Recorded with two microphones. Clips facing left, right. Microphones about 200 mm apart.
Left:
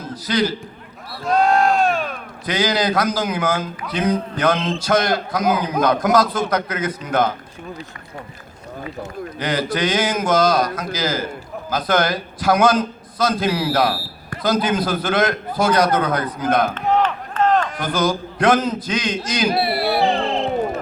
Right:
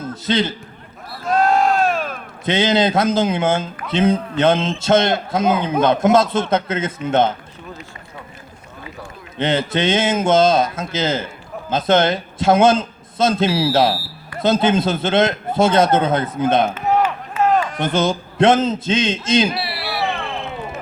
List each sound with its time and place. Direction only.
0.1 s a man's voice: 25° right (ahead or behind)
1.2 s a sound: centre (ahead or behind)
2.4 s speech: 25° right (ahead or behind)
9.4 s speech: 25° right (ahead or behind)
16.7 s chop: 5° right (ahead or behind)
17.7 s speech: 25° right (ahead or behind)
19.5 s speech: 50° left (ahead or behind)
20.4 s music: 45° left (ahead or behind)